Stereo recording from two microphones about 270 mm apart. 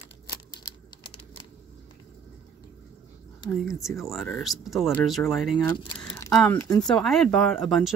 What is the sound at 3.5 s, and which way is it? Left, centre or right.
Speech, centre.